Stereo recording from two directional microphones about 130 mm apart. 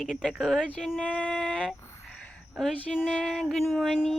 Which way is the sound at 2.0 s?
10° left (ahead or behind).